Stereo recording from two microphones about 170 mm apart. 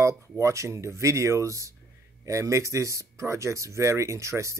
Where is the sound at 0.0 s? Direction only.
15° right (ahead or behind).